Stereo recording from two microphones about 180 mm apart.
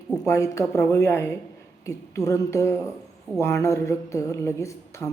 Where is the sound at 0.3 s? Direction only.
15° left (ahead or behind).